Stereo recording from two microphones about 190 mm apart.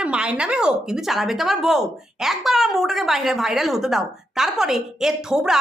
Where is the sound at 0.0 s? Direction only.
5° right (ahead or behind).